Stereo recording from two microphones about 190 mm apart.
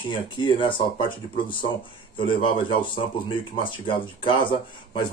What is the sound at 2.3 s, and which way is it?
Speech, 25° left (ahead or behind).